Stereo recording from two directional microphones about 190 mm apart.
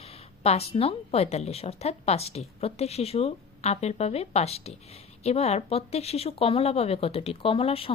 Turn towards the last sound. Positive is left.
turn(degrees=30)  # may be behind; listen again after turning